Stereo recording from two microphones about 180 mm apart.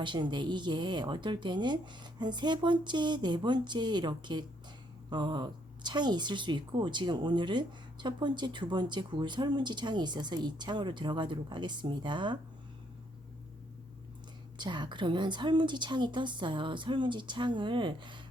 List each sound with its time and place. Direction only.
0.0 s a woman's voice: 25° right (ahead or behind)
14.6 s a woman's voice: 25° right (ahead or behind)